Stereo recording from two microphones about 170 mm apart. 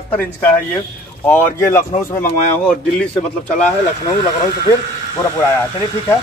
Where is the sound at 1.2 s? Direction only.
15° left (ahead or behind).